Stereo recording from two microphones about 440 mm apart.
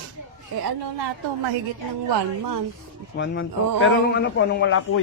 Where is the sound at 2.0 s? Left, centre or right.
Right.